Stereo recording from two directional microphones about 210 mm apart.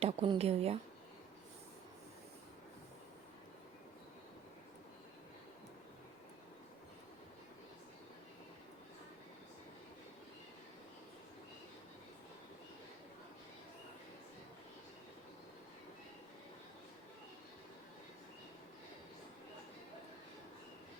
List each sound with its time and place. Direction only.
0.0 s speech: 30° right (ahead or behind)